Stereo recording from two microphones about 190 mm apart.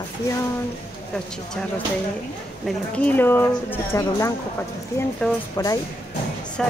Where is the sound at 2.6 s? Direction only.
5° left (ahead or behind).